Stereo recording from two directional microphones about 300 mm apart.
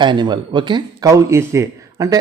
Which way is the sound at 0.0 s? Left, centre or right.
Centre.